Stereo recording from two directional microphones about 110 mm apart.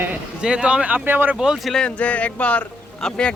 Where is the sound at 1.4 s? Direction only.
5° right (ahead or behind).